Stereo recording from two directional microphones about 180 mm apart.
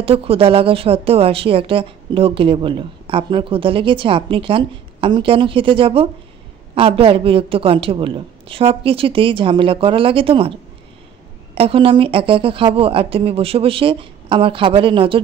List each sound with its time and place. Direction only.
0.0 s a woman's voice: 30° right (ahead or behind)
11.5 s a woman's voice: 30° right (ahead or behind)